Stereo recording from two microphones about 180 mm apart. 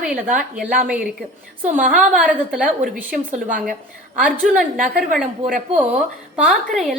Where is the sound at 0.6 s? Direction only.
50° right (ahead or behind).